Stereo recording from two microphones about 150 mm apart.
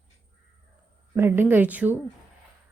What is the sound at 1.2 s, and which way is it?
Speech, 15° right (ahead or behind).